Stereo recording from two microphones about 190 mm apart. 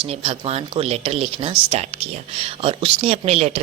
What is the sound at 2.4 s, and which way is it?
A woman's voice, 30° right (ahead or behind).